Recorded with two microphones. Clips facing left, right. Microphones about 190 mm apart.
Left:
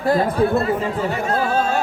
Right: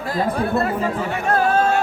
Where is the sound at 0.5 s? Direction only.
60° right (ahead or behind).